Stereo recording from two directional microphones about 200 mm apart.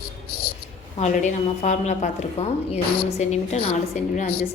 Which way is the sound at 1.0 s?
35° left (ahead or behind).